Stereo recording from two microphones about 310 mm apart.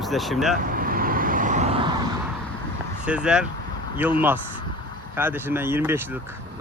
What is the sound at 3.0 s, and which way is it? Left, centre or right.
Speech, centre.